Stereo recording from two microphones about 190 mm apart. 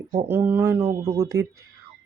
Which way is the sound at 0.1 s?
15° right (ahead or behind).